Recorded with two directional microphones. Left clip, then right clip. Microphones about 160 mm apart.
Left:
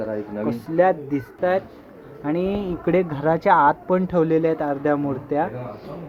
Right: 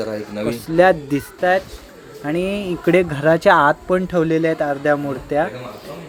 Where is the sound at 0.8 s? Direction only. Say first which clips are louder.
Right 5 dB; 20° right (ahead or behind).